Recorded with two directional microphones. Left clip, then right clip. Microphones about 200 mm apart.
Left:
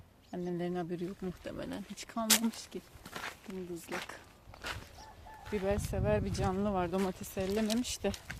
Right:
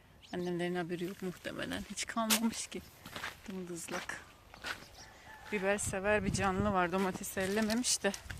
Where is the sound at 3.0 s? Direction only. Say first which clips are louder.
Left 1 dB; 25° left (ahead or behind).